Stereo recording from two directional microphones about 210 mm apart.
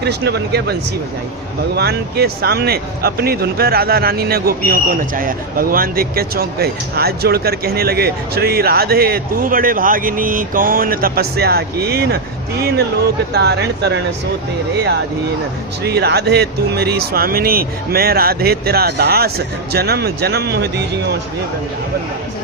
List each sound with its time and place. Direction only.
0.0 s speech: 50° right (ahead or behind)
15.8 s speech: 50° right (ahead or behind)